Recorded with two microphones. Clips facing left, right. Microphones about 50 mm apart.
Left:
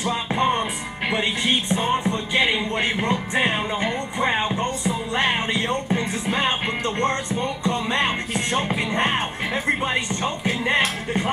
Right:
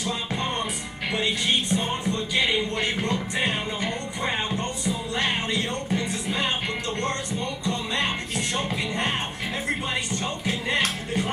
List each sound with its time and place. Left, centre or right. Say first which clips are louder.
0.0 s music: left 7 dB; left